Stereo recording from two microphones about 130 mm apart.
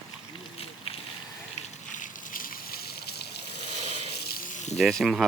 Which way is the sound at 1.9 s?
90° left.